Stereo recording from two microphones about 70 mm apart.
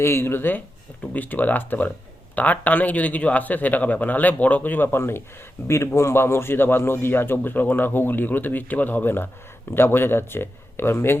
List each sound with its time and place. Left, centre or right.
0.0 s a man's voice: left